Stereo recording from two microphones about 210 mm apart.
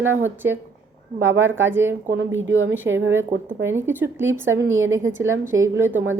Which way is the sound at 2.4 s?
65° right (ahead or behind).